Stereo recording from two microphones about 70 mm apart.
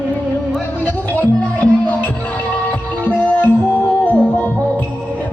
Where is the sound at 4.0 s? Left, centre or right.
Left.